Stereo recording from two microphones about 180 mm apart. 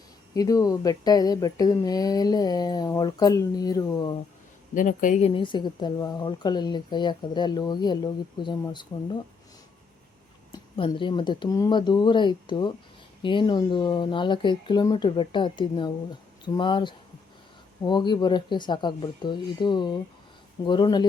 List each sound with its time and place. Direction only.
0.3 s speech: 20° left (ahead or behind)
4.7 s speech: 45° left (ahead or behind)
5.3 s speech: 25° left (ahead or behind)
10.8 s speech: 30° left (ahead or behind)